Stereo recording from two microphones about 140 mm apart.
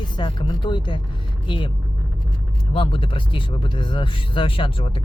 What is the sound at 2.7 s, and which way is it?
Speech, 40° left (ahead or behind).